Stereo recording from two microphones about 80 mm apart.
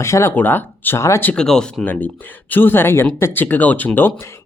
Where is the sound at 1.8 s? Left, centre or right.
Centre.